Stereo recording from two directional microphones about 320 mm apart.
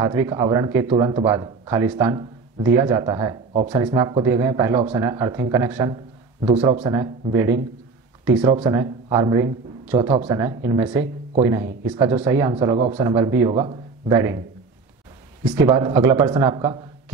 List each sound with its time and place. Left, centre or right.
0.0 s a man's voice: centre
15.4 s a man's voice: centre